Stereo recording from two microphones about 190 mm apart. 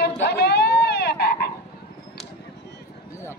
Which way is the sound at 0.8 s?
60° left (ahead or behind).